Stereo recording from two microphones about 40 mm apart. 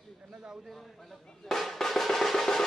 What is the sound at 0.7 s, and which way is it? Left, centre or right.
Speech, centre.